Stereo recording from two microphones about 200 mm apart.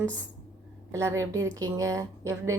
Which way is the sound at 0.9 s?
15° right (ahead or behind).